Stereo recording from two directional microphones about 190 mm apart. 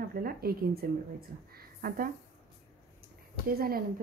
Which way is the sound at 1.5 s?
50° right (ahead or behind).